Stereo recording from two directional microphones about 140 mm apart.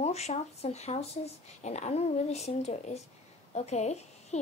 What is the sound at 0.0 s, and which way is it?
A woman's voice, 50° left (ahead or behind).